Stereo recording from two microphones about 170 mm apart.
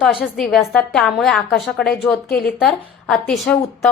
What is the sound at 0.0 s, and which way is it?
A woman's voice, centre (ahead or behind).